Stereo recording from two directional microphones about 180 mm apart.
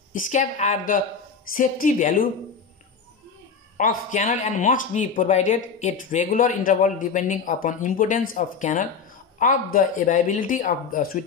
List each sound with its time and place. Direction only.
0.1 s a man's voice: 45° left (ahead or behind)
3.7 s a man's voice: 45° left (ahead or behind)